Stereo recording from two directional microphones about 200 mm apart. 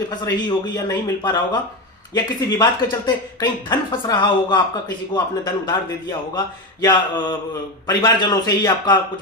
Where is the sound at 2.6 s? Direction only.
20° left (ahead or behind).